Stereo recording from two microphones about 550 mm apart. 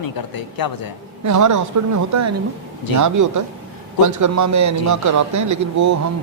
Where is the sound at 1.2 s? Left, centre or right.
Right.